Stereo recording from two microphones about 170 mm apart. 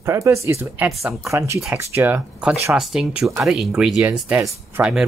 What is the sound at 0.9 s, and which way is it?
Speech, centre (ahead or behind).